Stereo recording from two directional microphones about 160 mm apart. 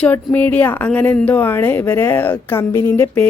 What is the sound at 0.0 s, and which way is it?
Speech, 10° left (ahead or behind).